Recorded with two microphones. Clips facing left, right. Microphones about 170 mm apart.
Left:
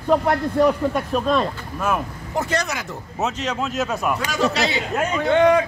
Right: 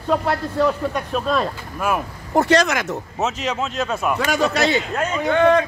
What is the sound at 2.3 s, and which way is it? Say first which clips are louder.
Speech: right 7 dB; 85° right.